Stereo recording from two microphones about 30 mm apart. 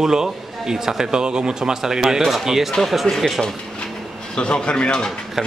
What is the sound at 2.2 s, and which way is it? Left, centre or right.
Speech, centre.